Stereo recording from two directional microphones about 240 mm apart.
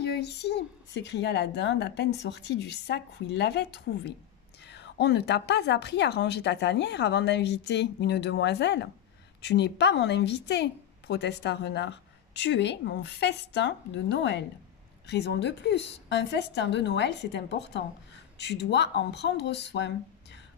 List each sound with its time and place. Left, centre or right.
0.0 s a woman's voice: left